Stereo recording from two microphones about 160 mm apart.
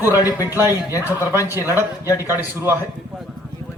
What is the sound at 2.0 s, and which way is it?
Speech, 20° left (ahead or behind).